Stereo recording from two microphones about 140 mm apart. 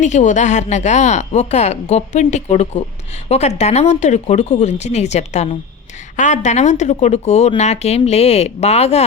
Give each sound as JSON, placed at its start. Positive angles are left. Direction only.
{"t": 0.0, "sound": "a woman's voice", "side_deg": 60}